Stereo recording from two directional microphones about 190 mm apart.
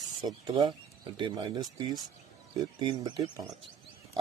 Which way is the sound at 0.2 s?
25° right (ahead or behind).